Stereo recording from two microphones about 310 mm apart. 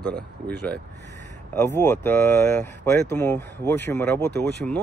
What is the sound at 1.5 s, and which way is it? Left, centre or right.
Speech, centre.